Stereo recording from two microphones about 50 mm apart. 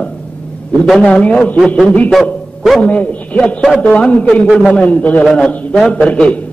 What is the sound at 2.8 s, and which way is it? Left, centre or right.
A man's voice, left.